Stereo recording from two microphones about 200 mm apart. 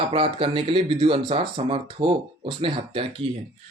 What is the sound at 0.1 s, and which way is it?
Speech, 25° right (ahead or behind).